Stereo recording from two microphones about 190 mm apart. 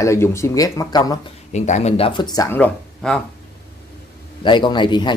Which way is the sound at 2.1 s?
20° left (ahead or behind).